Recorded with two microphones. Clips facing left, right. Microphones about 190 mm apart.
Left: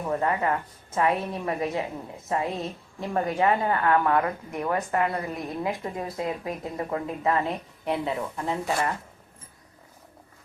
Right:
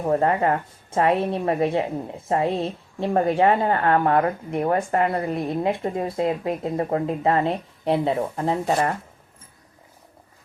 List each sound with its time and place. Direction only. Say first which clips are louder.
0.0 s a woman's voice: right 6 dB; 40° right (ahead or behind)